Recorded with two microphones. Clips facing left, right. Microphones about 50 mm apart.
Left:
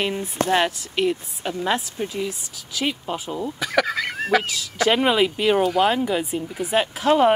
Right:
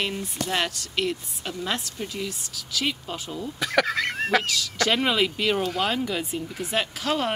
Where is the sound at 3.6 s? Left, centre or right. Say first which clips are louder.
Even; centre.